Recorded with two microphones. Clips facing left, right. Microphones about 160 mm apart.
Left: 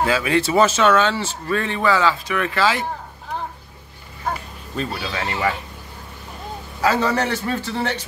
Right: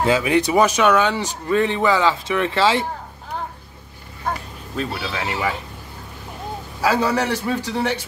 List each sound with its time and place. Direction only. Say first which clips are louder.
0.0 s speech: right 2 dB; 20° right (ahead or behind)
4.7 s speech: even; centre (ahead or behind)
6.8 s a man's voice: even; 10° right (ahead or behind)